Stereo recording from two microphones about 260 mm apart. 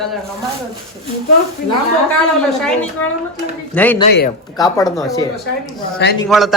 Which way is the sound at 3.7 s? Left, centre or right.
Centre.